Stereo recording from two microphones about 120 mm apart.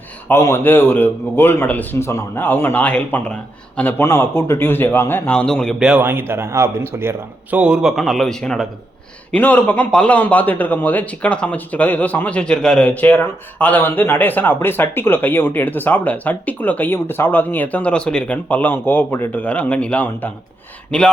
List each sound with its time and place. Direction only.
0.3 s a man's voice: 20° left (ahead or behind)
5.8 s a man's voice: 10° right (ahead or behind)
7.6 s a man's voice: 5° right (ahead or behind)